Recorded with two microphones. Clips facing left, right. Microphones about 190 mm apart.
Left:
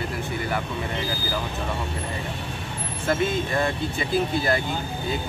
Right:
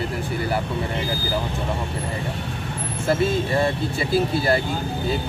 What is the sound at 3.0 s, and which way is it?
Speech, 30° right (ahead or behind).